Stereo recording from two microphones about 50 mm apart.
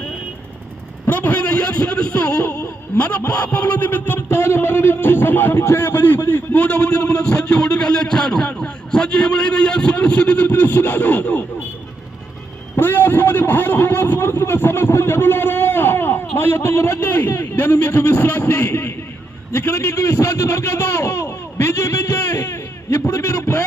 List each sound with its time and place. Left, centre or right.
1.1 s a sound: left
1.4 s a man's voice: left
2.5 s a sound: left
3.2 s a man's voice: left
8.6 s a man's voice: left
10.4 s a man's voice: left
12.7 s a man's voice: left
17.1 s a man's voice: left
20.7 s speech: left